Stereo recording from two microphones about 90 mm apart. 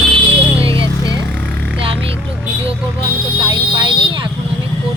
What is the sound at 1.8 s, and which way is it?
Speech, 90° right.